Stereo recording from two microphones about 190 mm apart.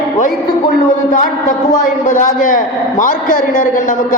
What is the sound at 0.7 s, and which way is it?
A man's voice, 40° left (ahead or behind).